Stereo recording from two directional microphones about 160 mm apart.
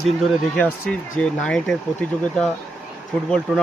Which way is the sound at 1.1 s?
5° left (ahead or behind).